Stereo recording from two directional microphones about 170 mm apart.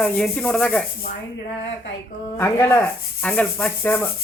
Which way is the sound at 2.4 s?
15° left (ahead or behind).